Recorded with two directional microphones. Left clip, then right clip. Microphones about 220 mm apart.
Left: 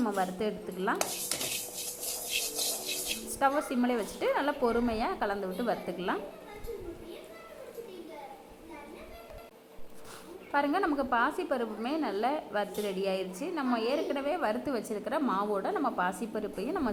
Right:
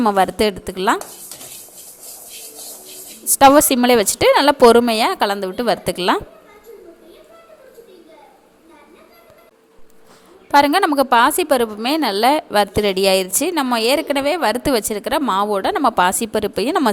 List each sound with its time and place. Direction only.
0.0 s a woman's voice: 55° right (ahead or behind)
3.2 s a woman's voice: 50° right (ahead or behind)
10.5 s a woman's voice: 50° right (ahead or behind)